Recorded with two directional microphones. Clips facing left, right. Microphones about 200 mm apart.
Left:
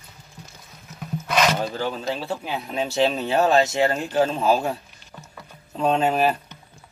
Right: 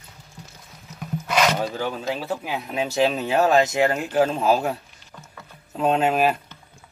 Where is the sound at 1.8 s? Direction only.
10° right (ahead or behind).